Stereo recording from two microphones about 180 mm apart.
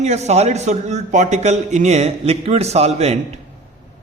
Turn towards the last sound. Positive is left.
turn(degrees=-35)  # may be behind; listen again after turning